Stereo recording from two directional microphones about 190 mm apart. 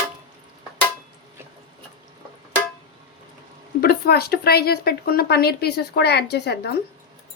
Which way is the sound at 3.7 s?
55° left (ahead or behind).